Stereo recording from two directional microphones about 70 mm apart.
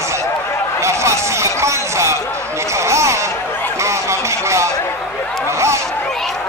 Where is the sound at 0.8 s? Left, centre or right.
Right.